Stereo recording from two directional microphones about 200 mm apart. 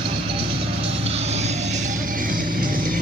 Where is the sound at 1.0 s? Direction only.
30° right (ahead or behind).